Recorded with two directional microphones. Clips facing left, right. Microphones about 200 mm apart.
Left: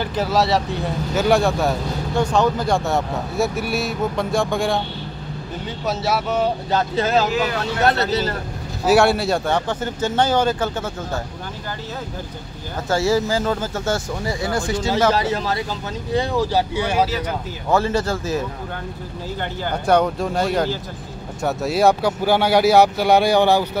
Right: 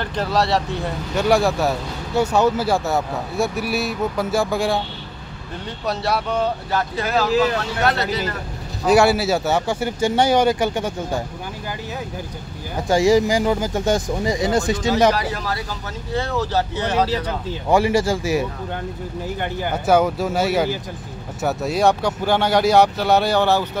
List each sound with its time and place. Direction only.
0.0 s speech: 5° left (ahead or behind)
5.9 s speech: centre (ahead or behind)
6.7 s speech: 25° left (ahead or behind)
8.8 s speech: centre (ahead or behind)
12.8 s speech: 15° right (ahead or behind)
15.1 s speech: 25° left (ahead or behind)
17.6 s speech: 10° right (ahead or behind)
19.7 s speech: 5° right (ahead or behind); by 23.7 s 15° left (ahead or behind)